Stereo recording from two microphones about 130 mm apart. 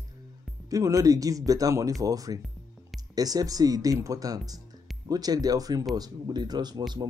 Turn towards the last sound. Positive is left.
turn(degrees=-30)  # may be behind; listen again after turning